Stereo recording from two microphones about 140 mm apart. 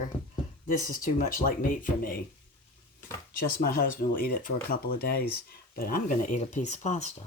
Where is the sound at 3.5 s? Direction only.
80° left; by 7.1 s 55° left (ahead or behind).